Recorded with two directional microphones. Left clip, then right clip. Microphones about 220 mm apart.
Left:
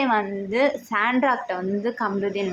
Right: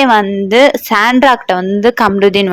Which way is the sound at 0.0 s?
45° right (ahead or behind).